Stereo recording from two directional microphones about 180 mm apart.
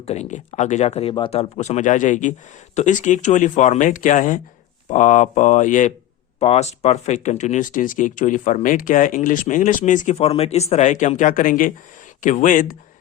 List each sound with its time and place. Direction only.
0.0 s speech: 35° left (ahead or behind)